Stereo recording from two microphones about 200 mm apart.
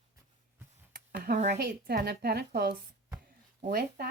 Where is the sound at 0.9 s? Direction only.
45° right (ahead or behind).